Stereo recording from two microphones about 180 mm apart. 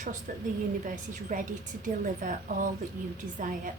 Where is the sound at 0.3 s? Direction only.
50° right (ahead or behind).